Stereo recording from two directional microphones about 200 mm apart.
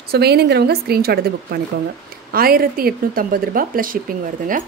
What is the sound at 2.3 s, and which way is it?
Speech, 45° right (ahead or behind).